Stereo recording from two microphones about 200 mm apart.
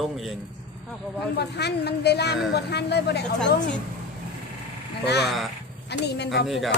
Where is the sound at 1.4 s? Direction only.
55° left (ahead or behind).